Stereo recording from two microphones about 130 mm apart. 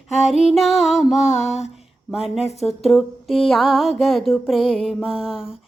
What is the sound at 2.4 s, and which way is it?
Mantra, 55° left (ahead or behind).